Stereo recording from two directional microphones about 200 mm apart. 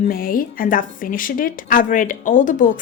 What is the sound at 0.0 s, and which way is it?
Speech, 45° left (ahead or behind).